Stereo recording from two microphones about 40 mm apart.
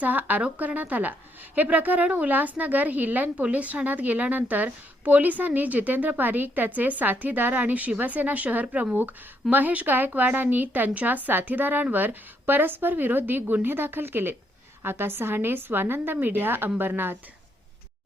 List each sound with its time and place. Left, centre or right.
0.0 s a woman's voice: right
9.0 s a woman's voice: right
14.8 s a woman's voice: right